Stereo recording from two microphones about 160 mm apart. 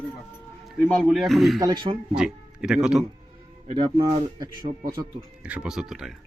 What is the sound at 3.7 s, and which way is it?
Speech, 30° right (ahead or behind).